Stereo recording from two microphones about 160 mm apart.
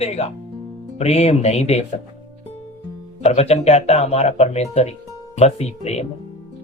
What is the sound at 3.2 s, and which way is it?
Speech, 40° left (ahead or behind).